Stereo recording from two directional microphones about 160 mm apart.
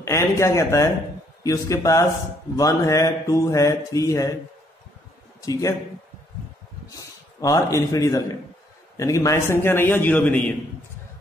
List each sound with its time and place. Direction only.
0.0 s speech: 20° left (ahead or behind)
5.4 s speech: 20° left (ahead or behind)
6.9 s a man's voice: 20° left (ahead or behind)